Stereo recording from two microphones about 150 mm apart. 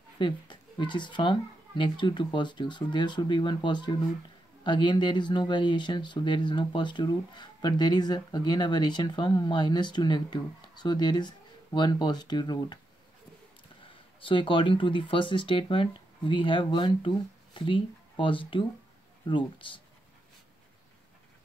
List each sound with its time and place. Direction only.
0.2 s speech: 30° left (ahead or behind)
14.2 s speech: 35° left (ahead or behind)